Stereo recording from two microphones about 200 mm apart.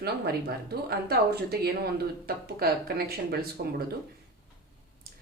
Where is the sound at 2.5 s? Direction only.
50° right (ahead or behind).